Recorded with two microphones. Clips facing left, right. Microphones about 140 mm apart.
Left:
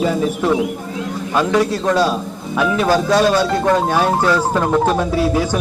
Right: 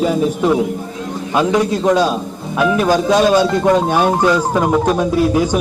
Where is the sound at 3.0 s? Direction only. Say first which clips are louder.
Right 2 dB; 20° right (ahead or behind).